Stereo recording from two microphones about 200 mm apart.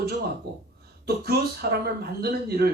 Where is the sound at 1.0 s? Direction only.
50° right (ahead or behind).